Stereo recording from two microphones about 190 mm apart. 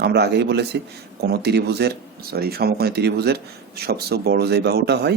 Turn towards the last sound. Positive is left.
turn(degrees=-60)  # may be behind; listen again after turning